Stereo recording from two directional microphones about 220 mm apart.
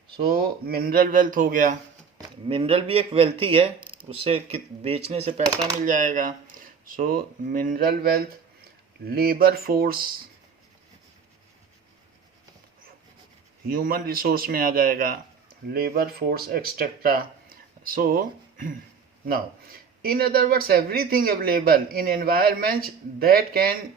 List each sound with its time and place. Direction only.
0.3 s speech: 45° right (ahead or behind)
2.1 s speech: 25° right (ahead or behind); by 10.2 s 40° right (ahead or behind)
13.7 s speech: 40° right (ahead or behind)
20.0 s speech: 40° right (ahead or behind)